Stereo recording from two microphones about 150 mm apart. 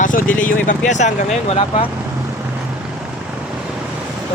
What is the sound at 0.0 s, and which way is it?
Speech, 60° left (ahead or behind).